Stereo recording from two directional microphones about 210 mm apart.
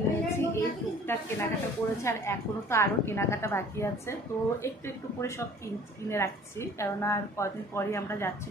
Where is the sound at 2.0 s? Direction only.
10° left (ahead or behind).